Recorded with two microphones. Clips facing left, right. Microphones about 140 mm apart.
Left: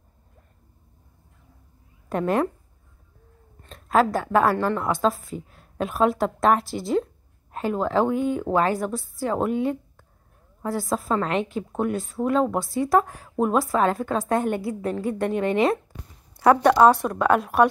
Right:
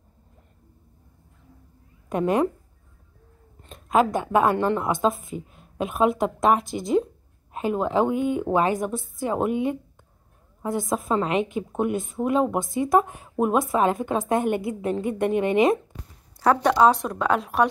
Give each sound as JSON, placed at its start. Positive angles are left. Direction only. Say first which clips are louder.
{"t": 3.6, "sound": "a woman's voice", "louder": "even", "side_deg": -15}
{"t": 16.3, "sound": "a woman's voice", "louder": "left 3 dB", "side_deg": 10}